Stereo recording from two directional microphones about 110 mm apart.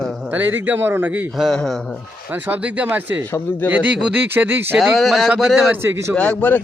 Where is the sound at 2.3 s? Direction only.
15° right (ahead or behind).